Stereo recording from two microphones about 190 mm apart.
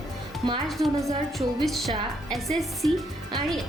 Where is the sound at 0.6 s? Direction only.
Centre (ahead or behind).